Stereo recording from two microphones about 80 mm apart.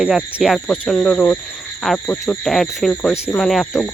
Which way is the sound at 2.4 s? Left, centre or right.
Centre.